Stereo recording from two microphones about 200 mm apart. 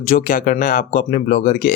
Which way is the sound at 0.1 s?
40° left (ahead or behind).